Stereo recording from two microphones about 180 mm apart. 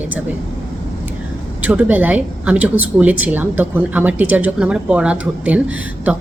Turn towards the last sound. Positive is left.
turn(degrees=-5)  # may be behind; listen again after turning